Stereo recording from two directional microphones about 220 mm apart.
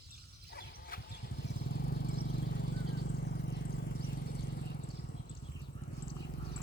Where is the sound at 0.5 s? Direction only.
45° left (ahead or behind).